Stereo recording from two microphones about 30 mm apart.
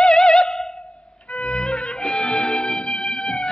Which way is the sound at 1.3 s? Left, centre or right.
Left.